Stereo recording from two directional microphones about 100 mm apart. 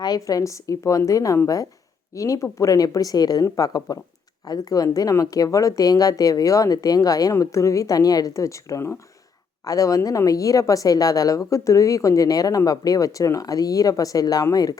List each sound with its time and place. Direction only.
0.0 s a woman's voice: 40° left (ahead or behind)